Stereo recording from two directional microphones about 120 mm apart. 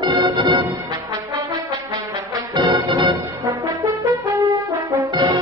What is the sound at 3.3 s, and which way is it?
Brass instrument, 25° right (ahead or behind).